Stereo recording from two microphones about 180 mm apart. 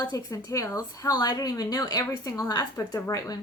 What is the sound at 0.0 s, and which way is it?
A woman's voice, 20° left (ahead or behind).